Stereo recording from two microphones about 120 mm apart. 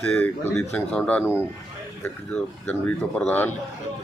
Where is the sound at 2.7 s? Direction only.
10° left (ahead or behind).